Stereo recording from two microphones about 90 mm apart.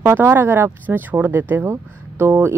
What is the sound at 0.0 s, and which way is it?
Speech, 30° right (ahead or behind).